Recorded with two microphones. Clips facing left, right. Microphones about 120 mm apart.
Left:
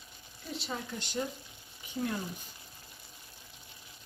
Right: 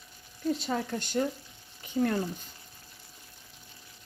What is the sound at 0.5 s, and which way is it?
Speech, 50° right (ahead or behind).